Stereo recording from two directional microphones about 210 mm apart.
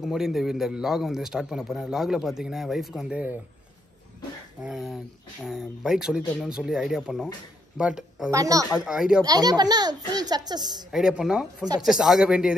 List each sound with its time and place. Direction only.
0.0 s a man's voice: centre (ahead or behind)
4.6 s a man's voice: centre (ahead or behind)
8.3 s a woman's voice: 15° right (ahead or behind)
8.6 s a man's voice: 5° right (ahead or behind)
9.2 s speech: 20° right (ahead or behind)
10.9 s a man's voice: 5° right (ahead or behind)